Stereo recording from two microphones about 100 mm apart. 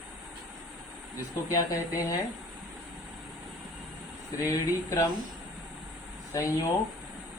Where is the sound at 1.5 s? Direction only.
30° left (ahead or behind).